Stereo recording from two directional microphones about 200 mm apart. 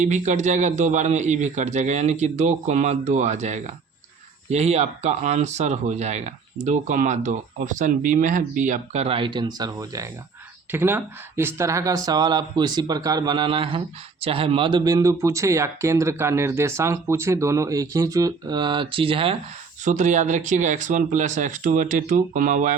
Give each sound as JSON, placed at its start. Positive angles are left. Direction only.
{"t": 0.0, "sound": "speech", "side_deg": -35}
{"t": 19.8, "sound": "speech", "side_deg": -40}